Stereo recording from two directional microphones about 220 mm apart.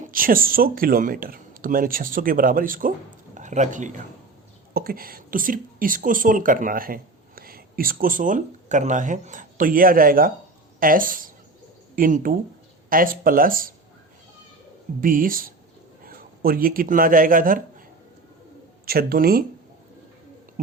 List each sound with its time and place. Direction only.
0.0 s speech: 40° right (ahead or behind)
15.0 s speech: 40° right (ahead or behind)
18.9 s speech: 45° right (ahead or behind)